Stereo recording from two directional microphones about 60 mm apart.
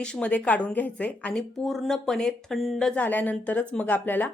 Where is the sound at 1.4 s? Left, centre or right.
Centre.